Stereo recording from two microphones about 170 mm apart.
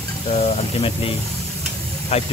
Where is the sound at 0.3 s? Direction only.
35° left (ahead or behind).